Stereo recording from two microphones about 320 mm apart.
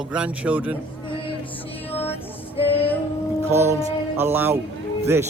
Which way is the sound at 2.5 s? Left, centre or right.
Centre.